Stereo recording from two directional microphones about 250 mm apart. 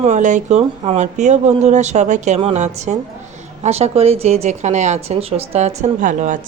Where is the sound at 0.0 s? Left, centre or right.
Right.